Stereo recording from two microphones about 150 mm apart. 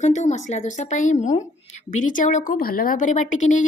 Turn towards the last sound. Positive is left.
turn(degrees=55)  # may be behind; listen again after turning